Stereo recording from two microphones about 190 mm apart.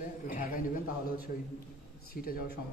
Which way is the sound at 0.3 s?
45° left (ahead or behind).